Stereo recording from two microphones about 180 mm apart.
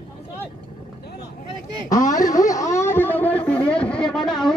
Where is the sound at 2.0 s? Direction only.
45° left (ahead or behind).